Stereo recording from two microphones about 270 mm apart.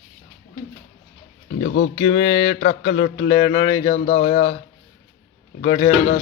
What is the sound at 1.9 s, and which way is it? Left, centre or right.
Speech, left.